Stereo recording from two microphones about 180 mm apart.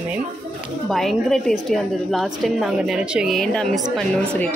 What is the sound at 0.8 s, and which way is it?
A woman's voice, centre (ahead or behind).